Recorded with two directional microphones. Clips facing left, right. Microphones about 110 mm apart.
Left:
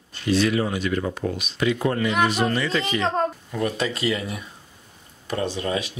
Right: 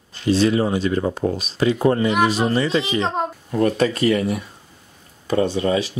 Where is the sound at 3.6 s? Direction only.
45° right (ahead or behind).